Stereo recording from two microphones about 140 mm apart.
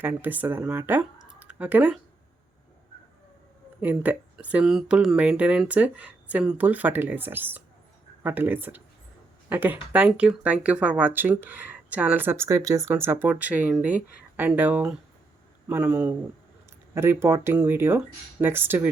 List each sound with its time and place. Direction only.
0.0 s speech: 15° right (ahead or behind)
3.8 s speech: 10° right (ahead or behind)
16.9 s speech: 20° right (ahead or behind)